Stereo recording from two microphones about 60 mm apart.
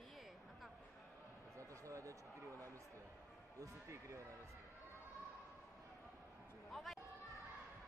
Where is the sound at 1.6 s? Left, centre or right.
Right.